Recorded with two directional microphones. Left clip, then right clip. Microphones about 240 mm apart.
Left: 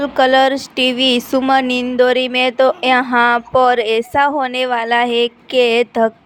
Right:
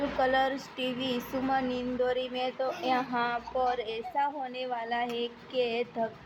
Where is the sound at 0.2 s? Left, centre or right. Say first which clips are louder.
Left 16 dB; left.